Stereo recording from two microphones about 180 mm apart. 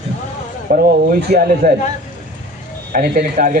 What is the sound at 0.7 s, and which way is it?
Speech, 55° right (ahead or behind).